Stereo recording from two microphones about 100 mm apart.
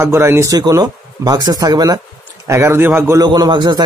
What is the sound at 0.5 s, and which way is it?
Speech, 40° right (ahead or behind).